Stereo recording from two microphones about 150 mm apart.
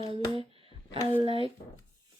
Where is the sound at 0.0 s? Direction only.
35° right (ahead or behind).